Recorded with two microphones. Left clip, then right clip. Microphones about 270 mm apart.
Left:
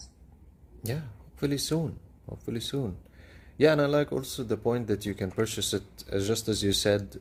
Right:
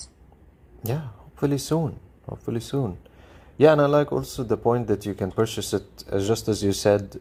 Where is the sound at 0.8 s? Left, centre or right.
Centre.